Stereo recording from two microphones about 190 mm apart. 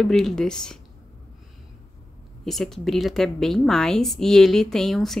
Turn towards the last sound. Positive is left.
turn(degrees=0)  # may be behind; listen again after turning